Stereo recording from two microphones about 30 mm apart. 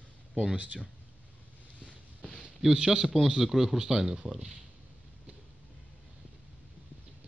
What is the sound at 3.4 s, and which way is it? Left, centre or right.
Speech, centre.